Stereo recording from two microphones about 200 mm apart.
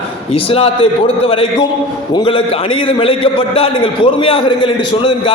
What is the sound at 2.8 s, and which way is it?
A man's voice, 25° left (ahead or behind).